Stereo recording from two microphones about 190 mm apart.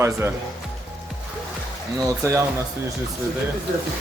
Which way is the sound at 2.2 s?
15° right (ahead or behind).